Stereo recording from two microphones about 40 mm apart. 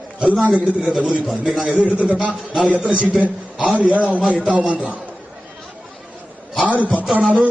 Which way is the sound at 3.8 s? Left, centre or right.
Right.